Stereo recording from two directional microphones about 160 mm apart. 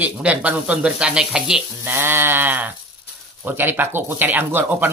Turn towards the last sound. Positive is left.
turn(degrees=-10)  # may be behind; listen again after turning